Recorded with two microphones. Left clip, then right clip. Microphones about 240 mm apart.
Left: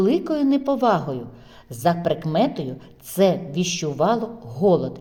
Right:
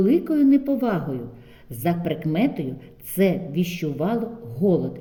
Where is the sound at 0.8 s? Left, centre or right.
Left.